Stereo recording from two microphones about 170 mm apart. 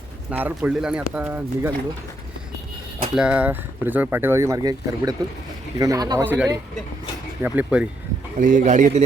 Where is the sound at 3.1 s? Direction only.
5° right (ahead or behind).